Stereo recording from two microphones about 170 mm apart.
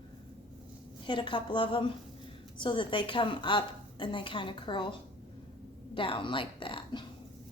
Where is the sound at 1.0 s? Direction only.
30° left (ahead or behind).